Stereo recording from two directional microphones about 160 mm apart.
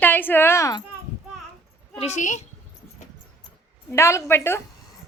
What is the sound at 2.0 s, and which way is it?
Speech, 45° left (ahead or behind).